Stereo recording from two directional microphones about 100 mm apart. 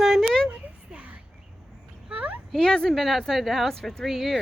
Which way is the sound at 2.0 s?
15° right (ahead or behind).